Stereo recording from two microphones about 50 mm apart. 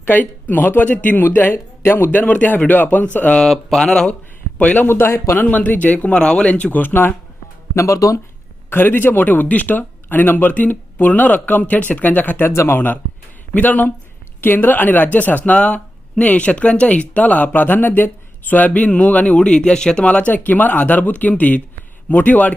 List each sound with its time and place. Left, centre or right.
0.0 s speech: left
2.1 s speech: left
3.4 s speech: centre
4.5 s a man's voice: left
4.9 s a man's voice: left
5.3 s speech: left
7.8 s speech: left
8.7 s speech: left
12.5 s speech: left
13.5 s speech: left
19.4 s speech: centre